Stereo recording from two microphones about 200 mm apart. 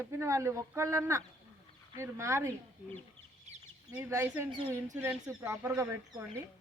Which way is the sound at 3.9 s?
15° right (ahead or behind).